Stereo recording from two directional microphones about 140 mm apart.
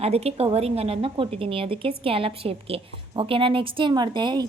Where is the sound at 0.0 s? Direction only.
45° right (ahead or behind).